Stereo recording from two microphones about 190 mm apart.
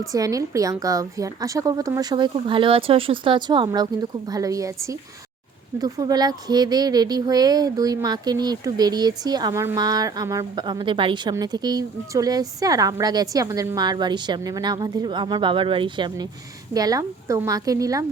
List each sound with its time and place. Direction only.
0.1 s a woman's voice: 20° right (ahead or behind)